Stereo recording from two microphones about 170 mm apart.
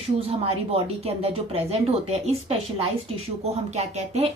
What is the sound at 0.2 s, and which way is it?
A woman's voice, 35° right (ahead or behind).